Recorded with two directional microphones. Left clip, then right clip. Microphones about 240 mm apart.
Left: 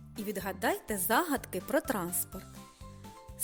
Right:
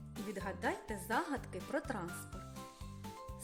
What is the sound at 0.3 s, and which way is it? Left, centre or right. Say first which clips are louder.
Speech: left 7 dB; left.